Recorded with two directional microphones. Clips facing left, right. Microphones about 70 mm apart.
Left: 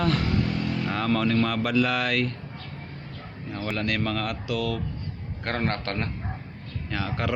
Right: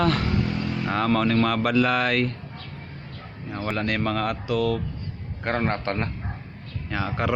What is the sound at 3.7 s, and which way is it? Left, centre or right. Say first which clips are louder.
Speech: right 2 dB; right.